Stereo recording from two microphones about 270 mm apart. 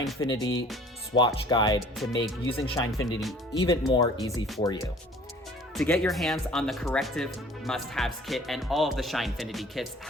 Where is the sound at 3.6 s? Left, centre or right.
Centre.